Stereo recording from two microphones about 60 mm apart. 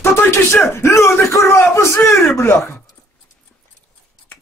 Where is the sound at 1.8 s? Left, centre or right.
Left.